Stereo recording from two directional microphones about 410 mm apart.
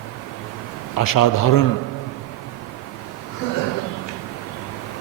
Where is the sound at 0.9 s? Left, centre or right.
Left.